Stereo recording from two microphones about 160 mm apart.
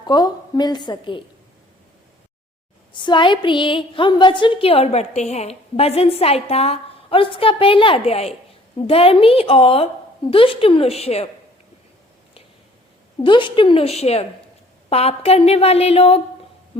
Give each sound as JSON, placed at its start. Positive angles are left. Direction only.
{"t": 0.1, "sound": "a woman's voice", "side_deg": 25}
{"t": 2.9, "sound": "a woman's voice", "side_deg": 30}
{"t": 13.1, "sound": "a woman's voice", "side_deg": 30}